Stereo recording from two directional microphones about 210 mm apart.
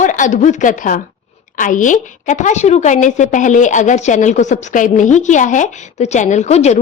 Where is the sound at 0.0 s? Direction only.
35° left (ahead or behind).